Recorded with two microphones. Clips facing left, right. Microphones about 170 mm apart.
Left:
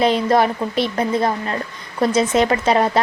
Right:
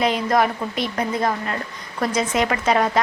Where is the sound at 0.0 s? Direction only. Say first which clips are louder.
Left 3 dB; 30° left (ahead or behind).